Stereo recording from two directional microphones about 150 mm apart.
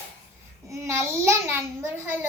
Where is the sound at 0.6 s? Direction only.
20° right (ahead or behind).